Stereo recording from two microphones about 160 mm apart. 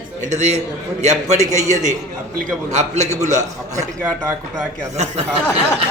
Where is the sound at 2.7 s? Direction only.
45° right (ahead or behind).